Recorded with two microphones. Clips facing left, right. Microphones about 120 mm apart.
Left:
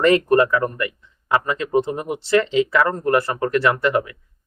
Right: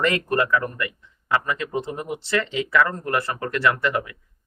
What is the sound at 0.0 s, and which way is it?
Speech, 30° left (ahead or behind).